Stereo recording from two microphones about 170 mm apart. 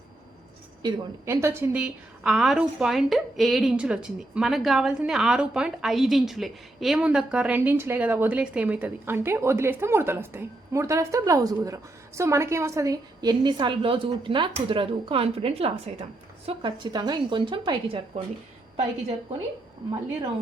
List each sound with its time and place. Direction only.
0.8 s a woman's voice: 20° right (ahead or behind)